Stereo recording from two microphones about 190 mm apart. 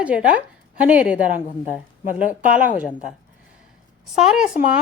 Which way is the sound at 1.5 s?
45° left (ahead or behind).